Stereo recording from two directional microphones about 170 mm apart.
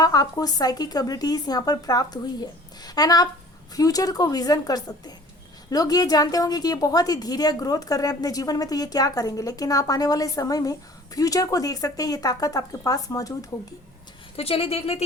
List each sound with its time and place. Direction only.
0.0 s a woman's voice: 20° left (ahead or behind)
14.3 s speech: 35° left (ahead or behind)